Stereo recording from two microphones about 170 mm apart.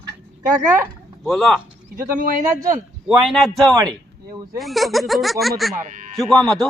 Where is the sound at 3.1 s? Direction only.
Centre (ahead or behind).